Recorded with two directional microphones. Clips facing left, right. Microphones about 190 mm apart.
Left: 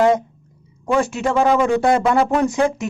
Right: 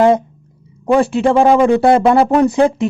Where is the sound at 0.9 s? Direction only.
35° right (ahead or behind).